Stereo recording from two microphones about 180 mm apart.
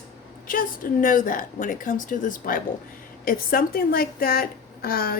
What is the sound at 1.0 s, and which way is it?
A woman's voice, 50° left (ahead or behind).